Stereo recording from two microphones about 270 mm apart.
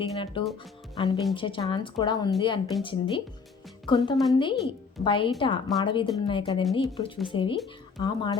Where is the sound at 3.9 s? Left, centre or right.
Centre.